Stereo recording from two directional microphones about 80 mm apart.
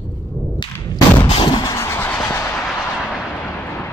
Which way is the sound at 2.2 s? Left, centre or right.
Left.